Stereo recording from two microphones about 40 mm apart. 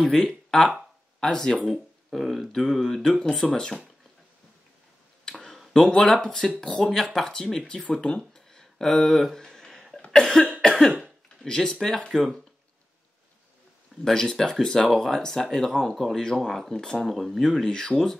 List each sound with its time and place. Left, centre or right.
0.1 s speech: centre
1.7 s speech: centre
3.0 s speech: centre
5.3 s a sound: centre
5.8 s speech: centre
7.6 s speech: left
8.3 s a sound: centre
9.7 s cough: centre
10.6 s cough: centre
11.4 s speech: centre
14.0 s speech: centre
16.3 s speech: centre
17.0 s speech: centre
17.5 s speech: centre